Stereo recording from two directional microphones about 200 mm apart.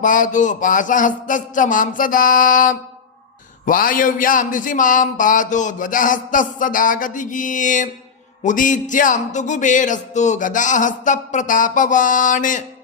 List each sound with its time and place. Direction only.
0.0 s a man's voice: 40° left (ahead or behind)